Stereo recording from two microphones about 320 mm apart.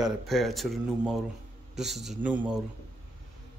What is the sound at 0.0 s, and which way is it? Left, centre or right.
Speech, centre.